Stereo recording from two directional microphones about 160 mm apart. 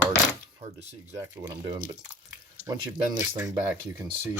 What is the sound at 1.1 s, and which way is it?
Speech, 20° right (ahead or behind).